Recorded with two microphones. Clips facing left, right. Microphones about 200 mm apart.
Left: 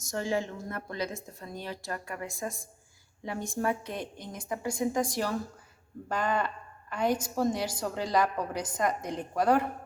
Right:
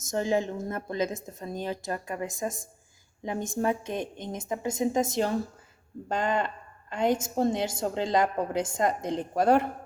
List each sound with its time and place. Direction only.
0.0 s a woman's voice: 20° right (ahead or behind)